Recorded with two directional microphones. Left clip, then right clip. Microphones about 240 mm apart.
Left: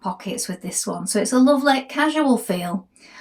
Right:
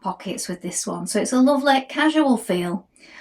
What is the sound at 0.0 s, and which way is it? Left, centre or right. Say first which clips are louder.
Speech: even; centre.